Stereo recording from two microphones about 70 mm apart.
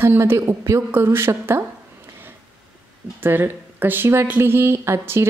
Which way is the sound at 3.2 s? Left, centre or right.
Right.